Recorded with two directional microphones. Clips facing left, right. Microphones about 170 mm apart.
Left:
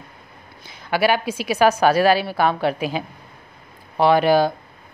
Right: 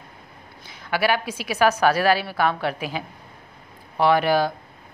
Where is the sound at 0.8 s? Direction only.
25° left (ahead or behind).